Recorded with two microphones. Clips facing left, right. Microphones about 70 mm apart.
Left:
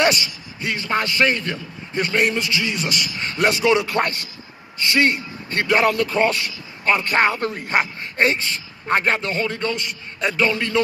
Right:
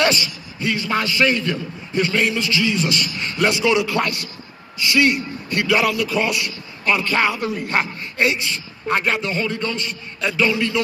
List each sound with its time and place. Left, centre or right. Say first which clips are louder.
0.0 s a man's voice: even; left